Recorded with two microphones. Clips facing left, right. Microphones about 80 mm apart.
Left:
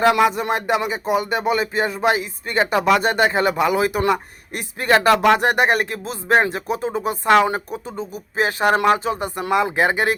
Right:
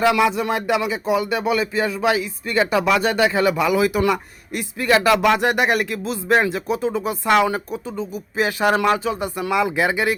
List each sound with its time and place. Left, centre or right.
0.0 s speech: left